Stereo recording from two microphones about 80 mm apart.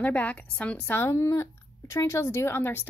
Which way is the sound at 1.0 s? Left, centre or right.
Left.